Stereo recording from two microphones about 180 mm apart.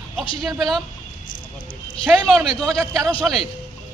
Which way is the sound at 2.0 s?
Centre (ahead or behind).